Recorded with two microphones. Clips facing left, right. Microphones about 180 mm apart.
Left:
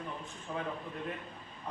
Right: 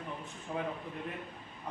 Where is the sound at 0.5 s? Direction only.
20° right (ahead or behind).